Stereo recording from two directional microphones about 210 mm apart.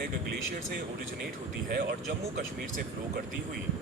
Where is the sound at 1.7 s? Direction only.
50° right (ahead or behind).